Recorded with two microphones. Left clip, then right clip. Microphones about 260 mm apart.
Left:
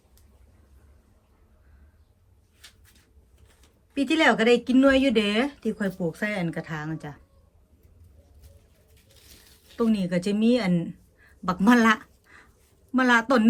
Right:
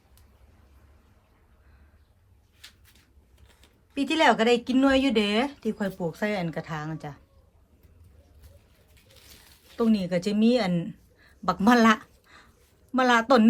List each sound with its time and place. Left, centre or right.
3.9 s speech: centre
9.0 s a sound: right
9.7 s speech: centre